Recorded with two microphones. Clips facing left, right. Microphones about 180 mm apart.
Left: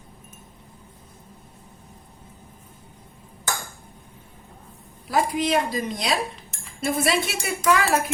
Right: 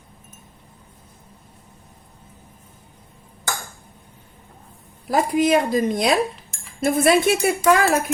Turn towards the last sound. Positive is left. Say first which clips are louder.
# right 5 dB
turn(degrees=-45)  # may be behind; listen again after turning